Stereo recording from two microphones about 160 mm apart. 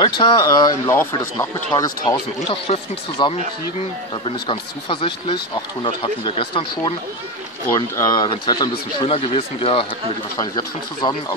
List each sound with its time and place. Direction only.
0.0 s speech: 30° left (ahead or behind); by 1.9 s 15° left (ahead or behind)
2.4 s speech: 35° left (ahead or behind)
4.5 s speech: 30° left (ahead or behind)